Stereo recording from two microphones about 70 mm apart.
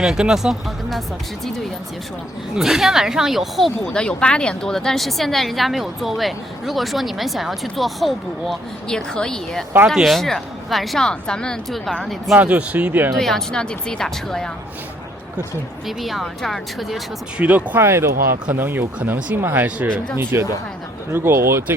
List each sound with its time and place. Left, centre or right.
0.0 s speech: centre
2.6 s a woman's voice: centre
3.8 s a woman's voice: centre
8.9 s a woman's voice: centre
12.4 s speech: centre
13.1 s speech: centre
15.9 s a woman's voice: centre
17.3 s speech: right
17.7 s speech: right